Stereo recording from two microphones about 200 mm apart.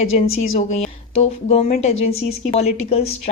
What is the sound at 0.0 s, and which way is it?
A woman's voice, 35° left (ahead or behind).